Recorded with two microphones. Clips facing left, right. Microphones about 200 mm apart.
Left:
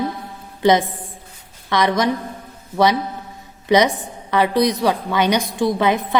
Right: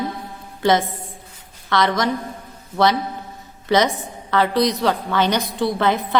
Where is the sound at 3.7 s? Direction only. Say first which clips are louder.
Left 2 dB; 15° left (ahead or behind).